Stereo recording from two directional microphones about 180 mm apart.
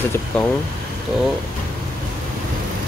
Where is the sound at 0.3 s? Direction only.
5° left (ahead or behind).